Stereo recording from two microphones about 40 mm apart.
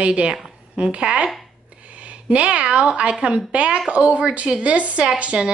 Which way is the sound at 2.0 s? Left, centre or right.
Right.